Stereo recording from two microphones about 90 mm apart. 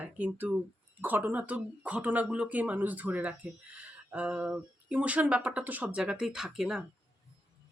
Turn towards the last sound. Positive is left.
turn(degrees=-5)  # may be behind; listen again after turning